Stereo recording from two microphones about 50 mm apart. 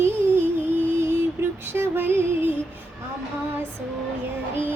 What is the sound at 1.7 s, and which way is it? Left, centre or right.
Female singing, right.